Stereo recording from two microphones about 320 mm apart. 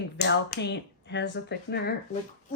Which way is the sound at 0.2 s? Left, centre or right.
Left.